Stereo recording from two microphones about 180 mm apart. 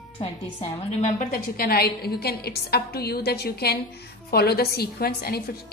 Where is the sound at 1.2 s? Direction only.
55° left (ahead or behind).